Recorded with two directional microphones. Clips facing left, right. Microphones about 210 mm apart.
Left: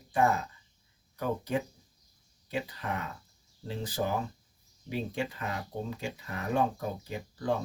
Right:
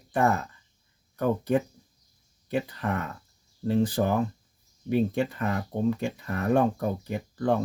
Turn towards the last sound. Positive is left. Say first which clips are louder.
# right 6 dB
turn(degrees=-55)  # may be behind; listen again after turning